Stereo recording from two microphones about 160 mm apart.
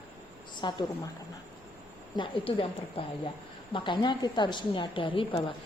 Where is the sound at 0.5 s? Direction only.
30° left (ahead or behind).